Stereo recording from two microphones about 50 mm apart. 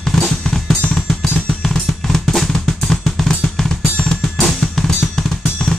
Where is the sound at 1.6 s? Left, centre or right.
Centre.